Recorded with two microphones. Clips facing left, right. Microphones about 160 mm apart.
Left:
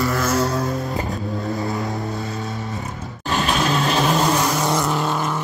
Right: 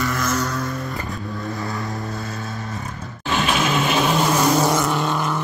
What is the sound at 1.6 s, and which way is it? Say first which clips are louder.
Vehicle: left 3 dB; 20° left (ahead or behind).